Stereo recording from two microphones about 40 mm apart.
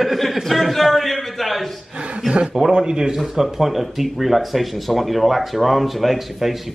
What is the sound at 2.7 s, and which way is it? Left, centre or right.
Speech, right.